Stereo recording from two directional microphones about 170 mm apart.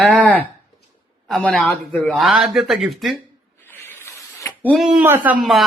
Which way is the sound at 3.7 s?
15° left (ahead or behind).